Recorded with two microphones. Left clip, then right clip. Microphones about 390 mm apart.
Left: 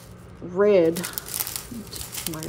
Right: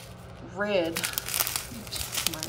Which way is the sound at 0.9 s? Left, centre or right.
Centre.